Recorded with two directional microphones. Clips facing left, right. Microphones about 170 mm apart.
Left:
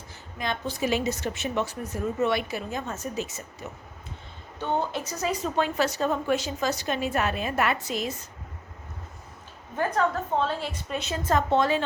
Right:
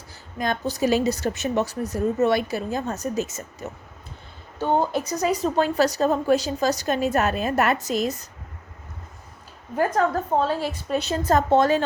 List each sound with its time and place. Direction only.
0.3 s speech: 45° right (ahead or behind)
9.7 s speech: 40° right (ahead or behind)